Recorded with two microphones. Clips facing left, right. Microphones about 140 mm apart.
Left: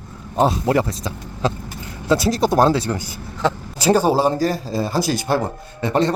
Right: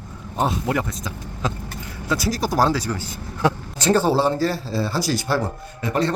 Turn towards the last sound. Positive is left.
turn(degrees=25)  # may be behind; listen again after turning